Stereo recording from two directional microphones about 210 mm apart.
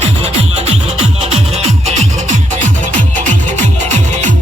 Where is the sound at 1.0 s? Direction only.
30° right (ahead or behind).